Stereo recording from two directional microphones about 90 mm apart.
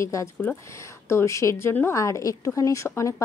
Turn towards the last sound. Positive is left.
turn(degrees=35)  # may be behind; listen again after turning